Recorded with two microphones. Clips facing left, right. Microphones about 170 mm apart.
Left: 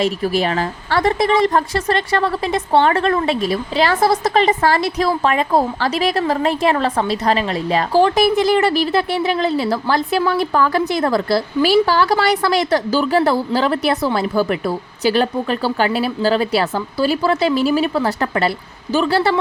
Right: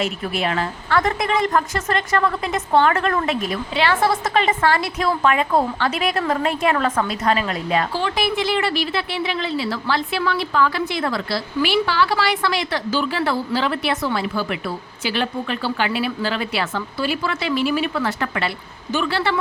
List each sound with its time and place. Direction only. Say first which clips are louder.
0.0 s a woman's voice: left 5 dB; 35° left (ahead or behind)